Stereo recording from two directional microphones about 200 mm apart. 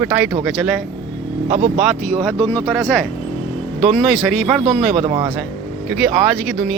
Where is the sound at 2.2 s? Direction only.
20° right (ahead or behind).